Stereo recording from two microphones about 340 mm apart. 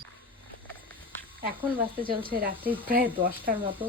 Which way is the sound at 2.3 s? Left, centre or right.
Right.